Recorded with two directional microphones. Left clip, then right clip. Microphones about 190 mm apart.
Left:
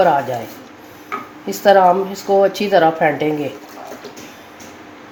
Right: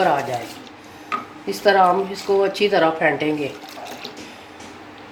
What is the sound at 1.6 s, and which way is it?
Speech, 50° left (ahead or behind).